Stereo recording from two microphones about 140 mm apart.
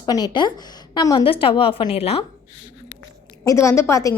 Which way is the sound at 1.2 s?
40° left (ahead or behind).